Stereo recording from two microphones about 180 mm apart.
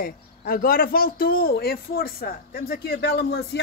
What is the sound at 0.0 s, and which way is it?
Speech, 55° left (ahead or behind).